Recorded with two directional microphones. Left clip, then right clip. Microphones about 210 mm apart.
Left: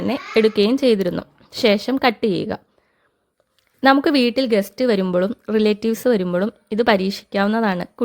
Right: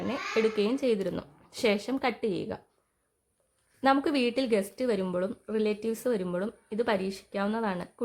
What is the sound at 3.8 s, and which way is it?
A woman's voice, 30° left (ahead or behind).